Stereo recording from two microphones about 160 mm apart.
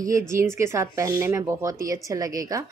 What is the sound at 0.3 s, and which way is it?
Speech, 15° right (ahead or behind).